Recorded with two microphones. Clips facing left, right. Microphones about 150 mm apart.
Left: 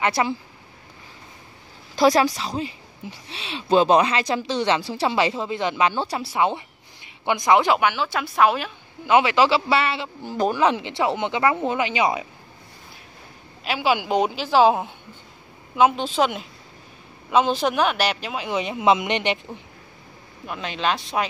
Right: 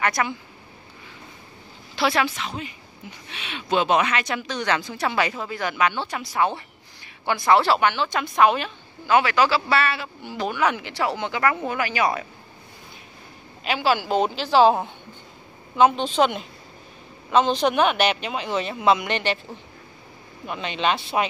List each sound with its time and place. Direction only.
0.0 s speech: 30° left (ahead or behind)
2.0 s a woman's voice: 40° left (ahead or behind); by 8.7 s 5° left (ahead or behind)
9.0 s speech: 20° left (ahead or behind)
10.2 s a woman's voice: 40° left (ahead or behind)
10.6 s speech: 25° left (ahead or behind)
13.7 s a man's voice: 10° left (ahead or behind)
20.4 s speech: centre (ahead or behind)